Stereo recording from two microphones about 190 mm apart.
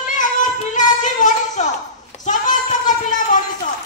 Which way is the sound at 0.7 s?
40° left (ahead or behind).